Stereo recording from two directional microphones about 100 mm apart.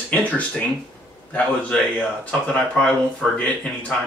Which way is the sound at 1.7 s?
10° left (ahead or behind).